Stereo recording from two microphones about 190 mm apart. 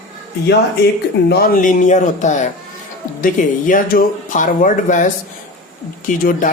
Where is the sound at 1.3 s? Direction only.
50° left (ahead or behind).